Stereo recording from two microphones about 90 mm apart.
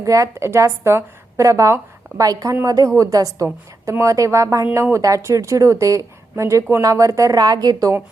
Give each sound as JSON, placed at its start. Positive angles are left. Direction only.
{"t": 0.0, "sound": "a woman's voice", "side_deg": -40}